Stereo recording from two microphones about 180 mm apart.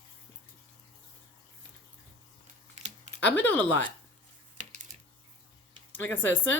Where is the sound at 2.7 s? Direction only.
40° right (ahead or behind).